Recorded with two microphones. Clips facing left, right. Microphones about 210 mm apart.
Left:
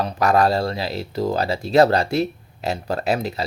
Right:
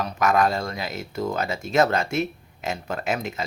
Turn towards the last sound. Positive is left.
turn(degrees=35)  # may be behind; listen again after turning